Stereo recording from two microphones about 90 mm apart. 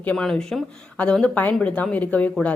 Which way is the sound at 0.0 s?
10° left (ahead or behind).